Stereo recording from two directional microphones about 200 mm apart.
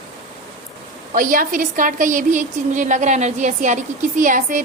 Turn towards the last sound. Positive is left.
turn(degrees=-40)  # may be behind; listen again after turning